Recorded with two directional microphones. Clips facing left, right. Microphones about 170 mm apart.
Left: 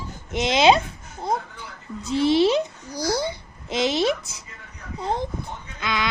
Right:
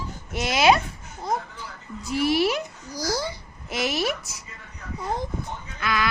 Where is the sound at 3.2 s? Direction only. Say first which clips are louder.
Left 3 dB; 20° left (ahead or behind).